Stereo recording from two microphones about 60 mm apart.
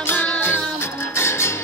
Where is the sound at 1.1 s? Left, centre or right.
Left.